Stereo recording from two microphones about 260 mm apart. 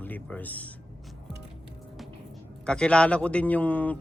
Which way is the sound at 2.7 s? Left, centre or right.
Centre.